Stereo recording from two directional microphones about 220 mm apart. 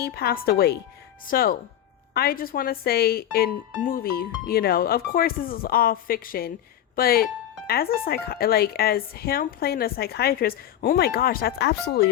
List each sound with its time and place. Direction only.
0.0 s speech: 45° left (ahead or behind)